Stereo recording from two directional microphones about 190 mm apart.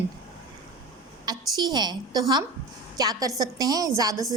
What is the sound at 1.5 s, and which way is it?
A woman's voice, 20° right (ahead or behind).